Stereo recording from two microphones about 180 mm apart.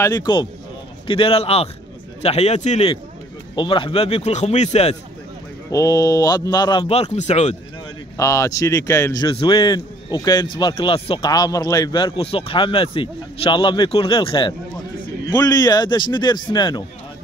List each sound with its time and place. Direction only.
0.0 s a man's voice: 25° left (ahead or behind)
5.7 s a man's voice: 20° left (ahead or behind)
6.9 s a man's voice: 35° left (ahead or behind)
8.2 s a man's voice: 15° left (ahead or behind)